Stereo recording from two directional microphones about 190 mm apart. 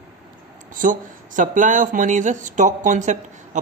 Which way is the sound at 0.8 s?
45° right (ahead or behind).